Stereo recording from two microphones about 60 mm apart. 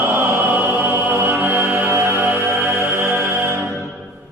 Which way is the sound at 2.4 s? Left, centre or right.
Right.